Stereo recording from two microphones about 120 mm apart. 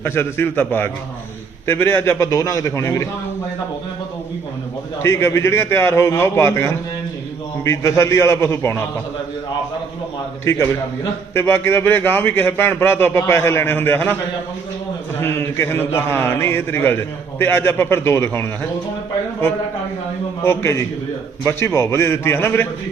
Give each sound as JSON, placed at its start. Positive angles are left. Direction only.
{"t": 0.0, "sound": "a man's voice", "side_deg": 20}
{"t": 5.0, "sound": "a man's voice", "side_deg": 20}
{"t": 10.4, "sound": "a man's voice", "side_deg": 25}
{"t": 15.2, "sound": "a man's voice", "side_deg": 20}
{"t": 20.4, "sound": "a man's voice", "side_deg": 20}